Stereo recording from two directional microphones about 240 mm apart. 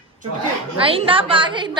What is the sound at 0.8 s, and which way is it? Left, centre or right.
Speech, right.